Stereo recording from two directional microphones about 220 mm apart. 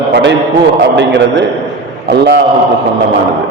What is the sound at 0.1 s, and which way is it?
A man's voice, 50° right (ahead or behind).